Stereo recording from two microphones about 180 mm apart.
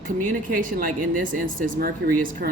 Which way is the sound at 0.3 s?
50° right (ahead or behind).